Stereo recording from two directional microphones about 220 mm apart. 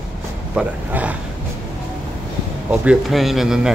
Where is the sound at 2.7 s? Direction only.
5° right (ahead or behind).